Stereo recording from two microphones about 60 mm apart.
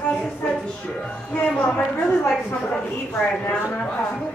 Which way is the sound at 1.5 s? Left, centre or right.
Left.